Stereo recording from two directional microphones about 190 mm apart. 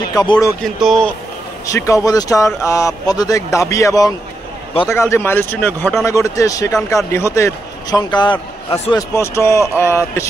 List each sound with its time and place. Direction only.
0.1 s speech: 20° left (ahead or behind)
0.7 s speech: centre (ahead or behind)
1.7 s speech: 15° left (ahead or behind)
4.7 s a man's voice: 30° left (ahead or behind)
5.1 s speech: 10° left (ahead or behind)